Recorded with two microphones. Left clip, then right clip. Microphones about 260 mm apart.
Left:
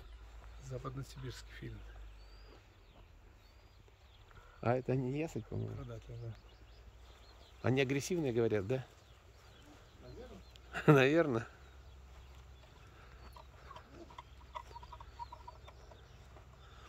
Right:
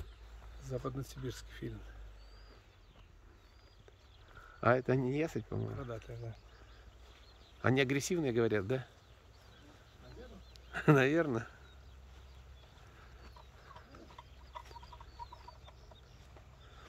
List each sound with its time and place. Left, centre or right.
0.6 s speech: right
4.6 s speech: centre
7.6 s speech: centre
10.7 s speech: centre
14.2 s bird: left
14.5 s chicken: left